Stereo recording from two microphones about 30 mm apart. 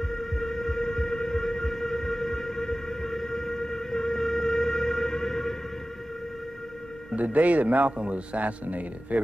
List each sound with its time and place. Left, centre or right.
0.1 s train: centre
7.2 s a man's voice: right